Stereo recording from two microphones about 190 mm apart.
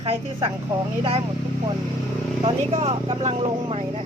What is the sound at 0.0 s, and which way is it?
Speech, 30° right (ahead or behind).